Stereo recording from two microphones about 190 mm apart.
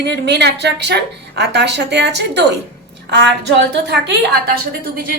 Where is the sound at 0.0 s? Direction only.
65° right (ahead or behind).